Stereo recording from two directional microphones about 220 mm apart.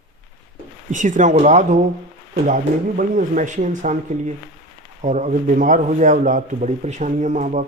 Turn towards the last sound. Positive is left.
turn(degrees=-35)  # may be behind; listen again after turning